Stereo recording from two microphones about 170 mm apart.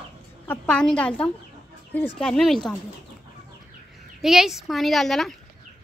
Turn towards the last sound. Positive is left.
turn(degrees=0)  # may be behind; listen again after turning